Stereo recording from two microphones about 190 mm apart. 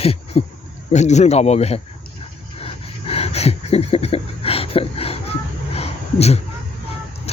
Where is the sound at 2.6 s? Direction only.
30° left (ahead or behind).